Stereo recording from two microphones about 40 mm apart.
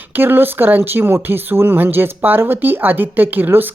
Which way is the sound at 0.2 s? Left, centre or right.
Right.